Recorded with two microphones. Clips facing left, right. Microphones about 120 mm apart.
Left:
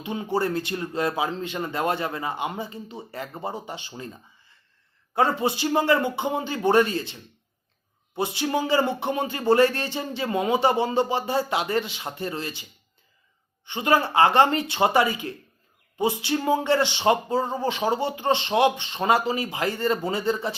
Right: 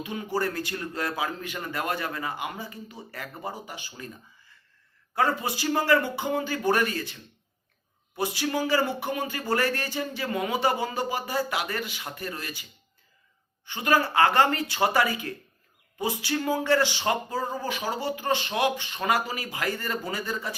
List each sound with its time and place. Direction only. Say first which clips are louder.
0.0 s speech: left 3 dB; 25° left (ahead or behind)
13.7 s speech: left 2 dB; 20° left (ahead or behind)